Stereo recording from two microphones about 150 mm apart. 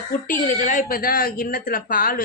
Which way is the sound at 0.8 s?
70° left (ahead or behind).